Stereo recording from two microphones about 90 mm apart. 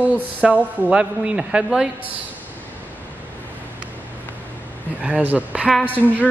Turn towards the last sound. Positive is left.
turn(degrees=-20)  # may be behind; listen again after turning